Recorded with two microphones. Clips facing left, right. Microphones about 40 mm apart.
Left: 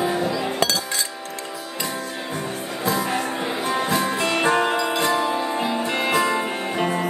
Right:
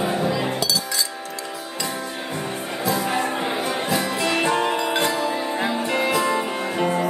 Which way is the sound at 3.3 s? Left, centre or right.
Centre.